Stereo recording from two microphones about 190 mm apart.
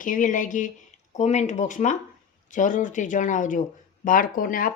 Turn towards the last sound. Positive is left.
turn(degrees=45)  # may be behind; listen again after turning